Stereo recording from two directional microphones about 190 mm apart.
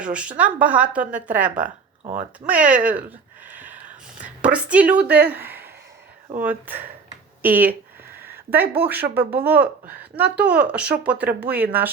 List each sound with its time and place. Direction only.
0.0 s speech: 5° right (ahead or behind)
1.6 s speech: 40° right (ahead or behind)
2.5 s speech: 5° right (ahead or behind)
8.2 s a sound: 10° right (ahead or behind)
8.7 s speech: 10° right (ahead or behind)